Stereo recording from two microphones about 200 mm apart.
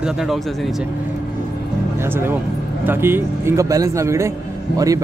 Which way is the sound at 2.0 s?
10° right (ahead or behind).